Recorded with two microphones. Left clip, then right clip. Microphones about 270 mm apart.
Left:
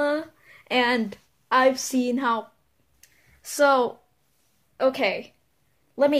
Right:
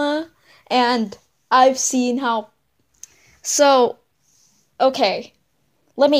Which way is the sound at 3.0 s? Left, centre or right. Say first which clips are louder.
Right 14 dB; right.